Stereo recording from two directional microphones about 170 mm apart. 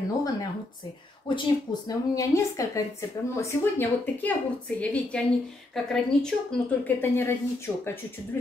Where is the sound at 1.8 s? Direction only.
20° left (ahead or behind).